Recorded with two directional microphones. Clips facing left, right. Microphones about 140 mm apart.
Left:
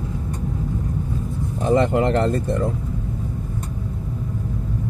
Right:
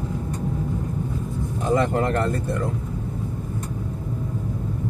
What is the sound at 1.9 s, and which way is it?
Speech, 20° left (ahead or behind).